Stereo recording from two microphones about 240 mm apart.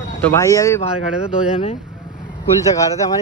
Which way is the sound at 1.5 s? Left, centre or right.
Left.